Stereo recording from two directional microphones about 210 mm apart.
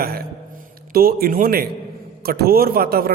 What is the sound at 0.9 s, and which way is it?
A man's voice, 45° right (ahead or behind).